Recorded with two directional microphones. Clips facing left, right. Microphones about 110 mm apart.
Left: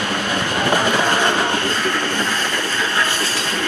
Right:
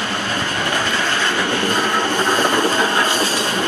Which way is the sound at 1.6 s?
15° right (ahead or behind).